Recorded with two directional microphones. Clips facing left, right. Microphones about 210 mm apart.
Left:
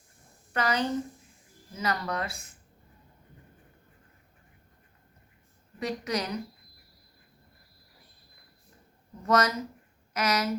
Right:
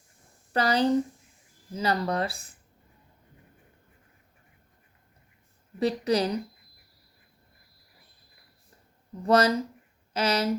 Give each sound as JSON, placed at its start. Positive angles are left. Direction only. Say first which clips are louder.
{"t": 0.5, "sound": "speech", "louder": "right 5 dB", "side_deg": -35}
{"t": 5.8, "sound": "speech", "louder": "right 7 dB", "side_deg": -30}
{"t": 9.2, "sound": "speech", "louder": "right 4 dB", "side_deg": -30}